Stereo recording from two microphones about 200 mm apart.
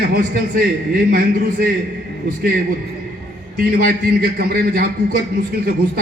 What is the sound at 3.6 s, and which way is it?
A man's voice, 50° right (ahead or behind).